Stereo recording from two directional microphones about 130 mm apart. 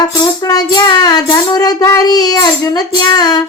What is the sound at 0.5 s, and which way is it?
Child singing, 30° left (ahead or behind).